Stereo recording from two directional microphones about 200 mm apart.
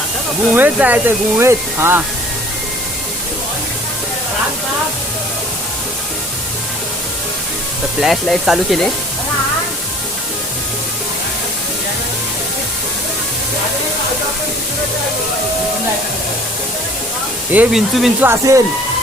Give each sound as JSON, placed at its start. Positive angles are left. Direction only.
{"t": 0.5, "sound": "speech", "side_deg": -10}
{"t": 8.0, "sound": "speech", "side_deg": 0}
{"t": 17.5, "sound": "speech", "side_deg": -5}
{"t": 18.3, "sound": "speech", "side_deg": -15}